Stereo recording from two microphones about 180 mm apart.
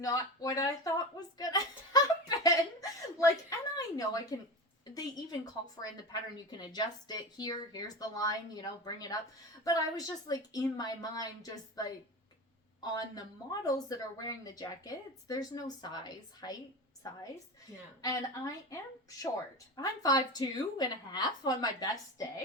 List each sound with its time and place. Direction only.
0.0 s a sound: 20° left (ahead or behind)
4.9 s a woman's voice: 20° left (ahead or behind)
12.8 s a woman's voice: 20° left (ahead or behind)